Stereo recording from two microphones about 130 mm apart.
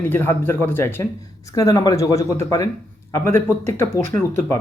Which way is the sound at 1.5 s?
30° left (ahead or behind).